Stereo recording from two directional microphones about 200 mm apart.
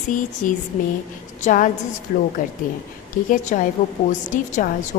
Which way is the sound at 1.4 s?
40° left (ahead or behind).